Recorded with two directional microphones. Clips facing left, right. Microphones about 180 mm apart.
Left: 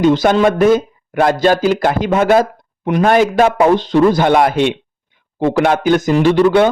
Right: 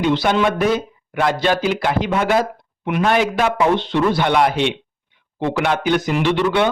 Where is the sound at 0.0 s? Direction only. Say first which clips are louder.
Left 6 dB; 45° left (ahead or behind).